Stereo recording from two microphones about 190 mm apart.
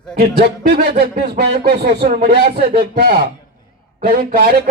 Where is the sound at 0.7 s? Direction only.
55° right (ahead or behind).